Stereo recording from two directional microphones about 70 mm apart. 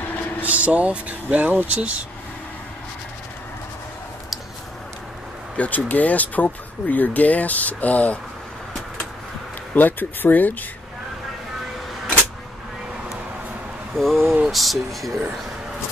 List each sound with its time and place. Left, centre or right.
0.4 s speech: right
5.6 s speech: left
9.8 s speech: left
13.9 s speech: centre